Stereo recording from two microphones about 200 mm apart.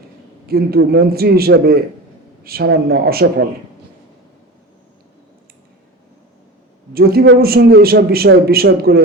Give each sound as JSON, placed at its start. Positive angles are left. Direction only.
{"t": 0.4, "sound": "a man's voice", "side_deg": -50}
{"t": 6.9, "sound": "a man's voice", "side_deg": -50}